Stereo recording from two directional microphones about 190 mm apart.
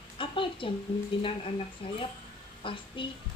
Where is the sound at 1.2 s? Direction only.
30° left (ahead or behind).